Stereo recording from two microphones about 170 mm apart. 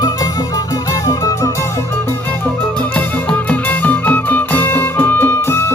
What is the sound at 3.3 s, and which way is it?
Music, 10° left (ahead or behind).